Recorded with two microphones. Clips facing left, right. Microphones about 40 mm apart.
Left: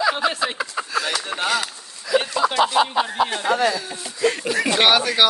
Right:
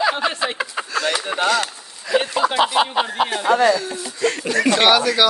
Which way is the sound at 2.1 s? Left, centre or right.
Right.